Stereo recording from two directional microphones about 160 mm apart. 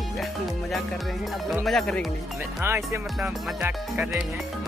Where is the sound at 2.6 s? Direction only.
15° right (ahead or behind).